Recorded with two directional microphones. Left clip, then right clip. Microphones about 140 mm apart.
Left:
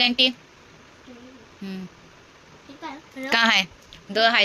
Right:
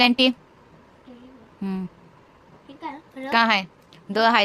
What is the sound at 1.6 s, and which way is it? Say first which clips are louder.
Speech: right 5 dB; 60° right (ahead or behind).